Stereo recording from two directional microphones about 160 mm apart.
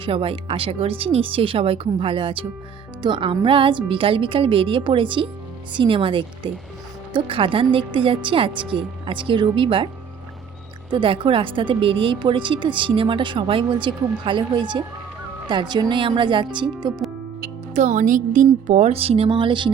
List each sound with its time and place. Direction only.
0.0 s a woman's voice: 35° right (ahead or behind)
10.9 s a woman's voice: 30° right (ahead or behind)
17.7 s a woman's voice: 50° right (ahead or behind); by 19.7 s 30° right (ahead or behind)